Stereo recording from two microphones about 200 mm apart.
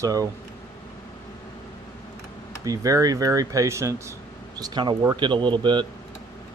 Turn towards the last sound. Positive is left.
turn(degrees=-25)  # may be behind; listen again after turning